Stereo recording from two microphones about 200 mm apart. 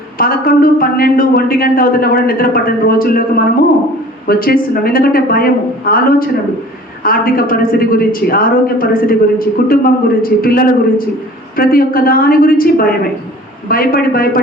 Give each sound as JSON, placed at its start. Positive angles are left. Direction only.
{"t": 0.2, "sound": "a woman's voice", "side_deg": 45}